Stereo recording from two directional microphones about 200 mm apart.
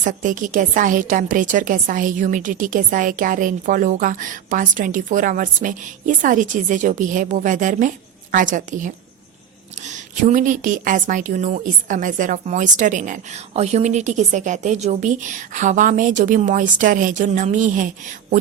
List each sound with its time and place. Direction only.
0.0 s a woman's voice: 40° right (ahead or behind)